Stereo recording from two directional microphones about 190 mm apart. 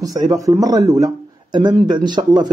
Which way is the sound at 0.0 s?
20° right (ahead or behind).